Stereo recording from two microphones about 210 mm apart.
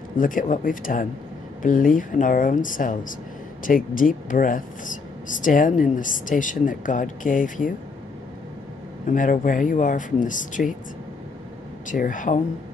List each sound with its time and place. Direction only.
0.2 s speech: 40° left (ahead or behind)
9.1 s speech: 40° left (ahead or behind)
11.9 s speech: 40° left (ahead or behind)